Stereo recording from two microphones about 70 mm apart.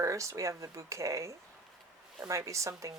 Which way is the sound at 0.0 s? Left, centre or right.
Right.